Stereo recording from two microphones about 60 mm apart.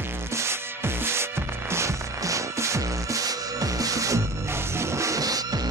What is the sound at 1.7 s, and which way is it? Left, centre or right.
Music, right.